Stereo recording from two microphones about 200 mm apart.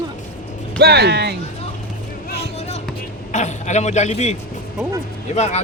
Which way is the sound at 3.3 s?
35° left (ahead or behind).